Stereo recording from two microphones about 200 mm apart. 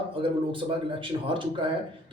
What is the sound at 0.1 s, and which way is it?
Speech, 25° right (ahead or behind).